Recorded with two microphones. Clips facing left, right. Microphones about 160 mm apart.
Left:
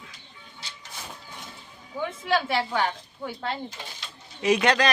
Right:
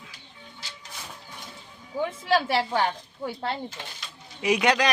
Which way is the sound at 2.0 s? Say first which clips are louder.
Right 2 dB; 35° right (ahead or behind).